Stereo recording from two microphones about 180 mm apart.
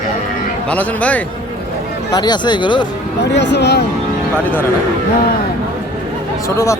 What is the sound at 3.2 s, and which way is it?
Speech, 75° left (ahead or behind).